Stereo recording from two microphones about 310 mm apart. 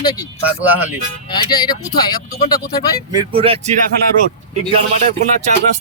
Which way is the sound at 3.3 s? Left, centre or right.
Centre.